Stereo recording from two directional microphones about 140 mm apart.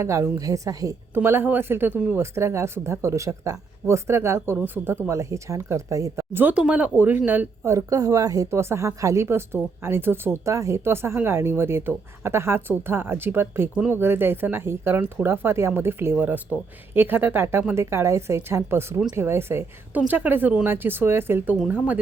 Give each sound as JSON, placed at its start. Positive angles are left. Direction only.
{"t": 0.0, "sound": "speech", "side_deg": -20}